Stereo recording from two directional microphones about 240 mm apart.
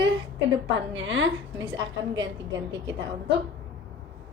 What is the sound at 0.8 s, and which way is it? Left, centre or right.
Speech, right.